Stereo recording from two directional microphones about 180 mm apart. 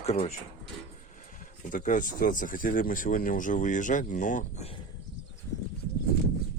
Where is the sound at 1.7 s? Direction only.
45° left (ahead or behind).